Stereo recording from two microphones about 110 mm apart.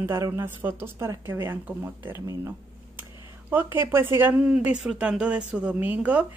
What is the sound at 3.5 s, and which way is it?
A woman's voice, 20° right (ahead or behind).